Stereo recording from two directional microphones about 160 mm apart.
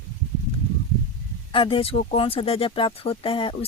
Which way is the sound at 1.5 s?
35° left (ahead or behind).